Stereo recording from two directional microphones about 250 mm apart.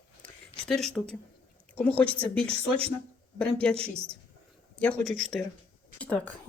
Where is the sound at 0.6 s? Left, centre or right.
Centre.